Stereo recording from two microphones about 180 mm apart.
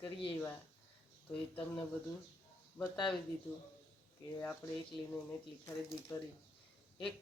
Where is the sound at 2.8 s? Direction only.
Centre (ahead or behind).